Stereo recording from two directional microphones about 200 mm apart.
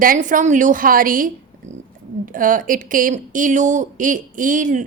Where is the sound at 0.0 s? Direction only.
40° right (ahead or behind).